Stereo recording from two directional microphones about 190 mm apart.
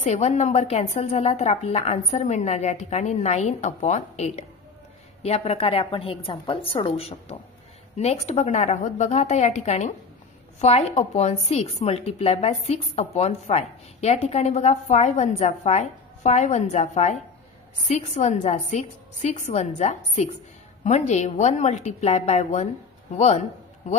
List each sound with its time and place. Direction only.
0.0 s a woman's voice: 35° left (ahead or behind)